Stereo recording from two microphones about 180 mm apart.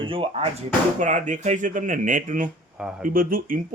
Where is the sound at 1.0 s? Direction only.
45° right (ahead or behind).